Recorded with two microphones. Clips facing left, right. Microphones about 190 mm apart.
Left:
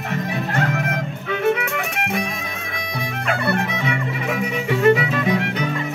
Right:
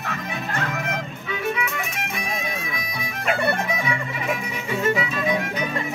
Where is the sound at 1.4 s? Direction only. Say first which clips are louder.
Left 7 dB; 70° left (ahead or behind).